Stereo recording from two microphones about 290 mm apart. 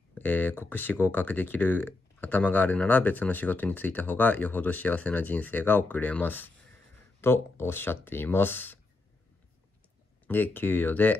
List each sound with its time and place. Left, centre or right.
0.1 s speech: centre
10.2 s speech: centre